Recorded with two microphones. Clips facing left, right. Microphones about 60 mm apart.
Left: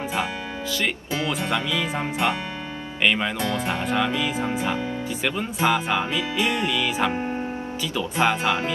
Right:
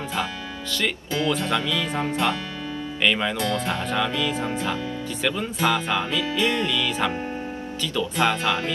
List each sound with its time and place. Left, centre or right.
1.1 s speech: left